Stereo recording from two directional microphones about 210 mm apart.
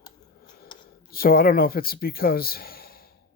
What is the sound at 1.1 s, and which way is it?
Speech, 45° left (ahead or behind).